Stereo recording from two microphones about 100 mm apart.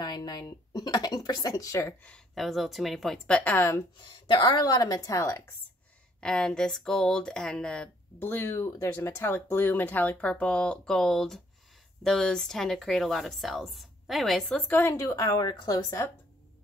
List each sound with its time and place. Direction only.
0.0 s speech: 45° left (ahead or behind)
1.9 s speech: 10° left (ahead or behind)
2.3 s speech: centre (ahead or behind)
3.3 s speech: 10° left (ahead or behind)
3.5 s speech: 25° left (ahead or behind)
4.0 s speech: 50° left (ahead or behind); by 5.4 s 30° left (ahead or behind)
6.2 s speech: 5° left (ahead or behind)
8.2 s speech: 25° left (ahead or behind); by 14.6 s 5° left (ahead or behind)
14.7 s speech: 25° left (ahead or behind); by 16.0 s 40° left (ahead or behind)